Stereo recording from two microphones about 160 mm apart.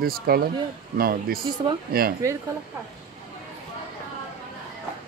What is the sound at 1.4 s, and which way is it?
Speech, 30° right (ahead or behind).